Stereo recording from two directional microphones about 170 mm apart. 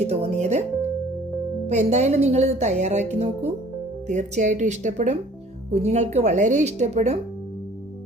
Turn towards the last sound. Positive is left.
turn(degrees=-40)  # may be behind; listen again after turning